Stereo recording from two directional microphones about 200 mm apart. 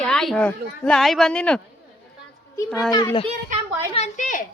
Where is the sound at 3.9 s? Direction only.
35° left (ahead or behind).